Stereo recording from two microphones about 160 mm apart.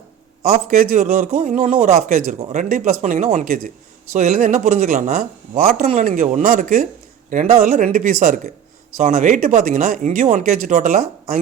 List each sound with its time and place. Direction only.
0.8 s speech: 55° right (ahead or behind)